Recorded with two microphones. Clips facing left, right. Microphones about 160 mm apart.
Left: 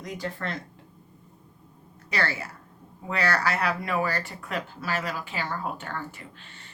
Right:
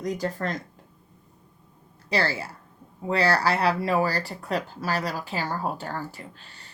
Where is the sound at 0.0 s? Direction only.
40° right (ahead or behind).